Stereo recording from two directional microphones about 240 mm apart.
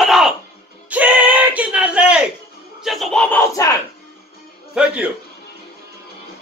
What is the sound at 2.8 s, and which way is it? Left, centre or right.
Battle cry, centre.